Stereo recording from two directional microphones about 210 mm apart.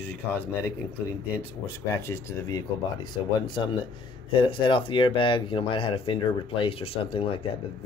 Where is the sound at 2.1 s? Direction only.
15° left (ahead or behind).